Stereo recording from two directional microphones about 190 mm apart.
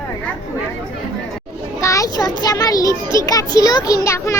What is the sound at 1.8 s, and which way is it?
Child singing, 15° left (ahead or behind).